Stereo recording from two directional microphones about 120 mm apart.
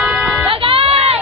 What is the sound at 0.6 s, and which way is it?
Crowd, 50° right (ahead or behind).